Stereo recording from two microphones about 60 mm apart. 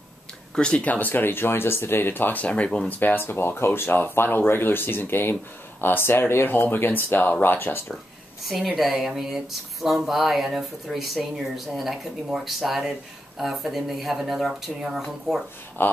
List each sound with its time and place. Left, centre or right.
0.6 s speech: centre
3.0 s speech: left
8.7 s speech: centre
15.8 s speech: left